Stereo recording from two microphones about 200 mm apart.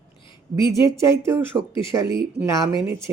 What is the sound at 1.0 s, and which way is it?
Speech, 15° right (ahead or behind).